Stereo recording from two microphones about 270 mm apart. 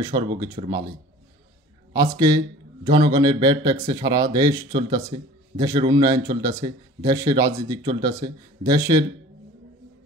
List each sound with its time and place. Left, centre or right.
0.0 s speech: centre
2.0 s speech: centre